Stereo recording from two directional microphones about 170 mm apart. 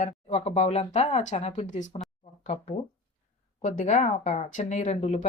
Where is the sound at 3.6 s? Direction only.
45° left (ahead or behind).